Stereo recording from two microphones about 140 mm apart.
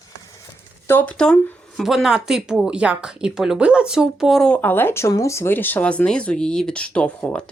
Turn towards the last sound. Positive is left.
turn(degrees=10)  # may be behind; listen again after turning